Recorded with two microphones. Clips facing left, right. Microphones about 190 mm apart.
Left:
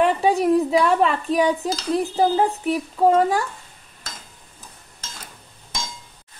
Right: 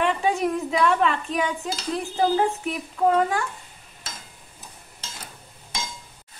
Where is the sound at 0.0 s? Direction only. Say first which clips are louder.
Left 5 dB; 35° left (ahead or behind).